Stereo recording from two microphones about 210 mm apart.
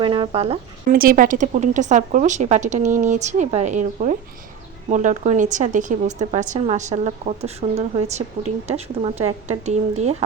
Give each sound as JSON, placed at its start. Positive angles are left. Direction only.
{"t": 0.0, "sound": "speech", "side_deg": -25}
{"t": 0.9, "sound": "speech", "side_deg": -40}